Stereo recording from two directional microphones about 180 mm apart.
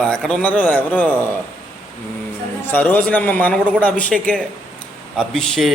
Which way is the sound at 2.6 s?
10° left (ahead or behind).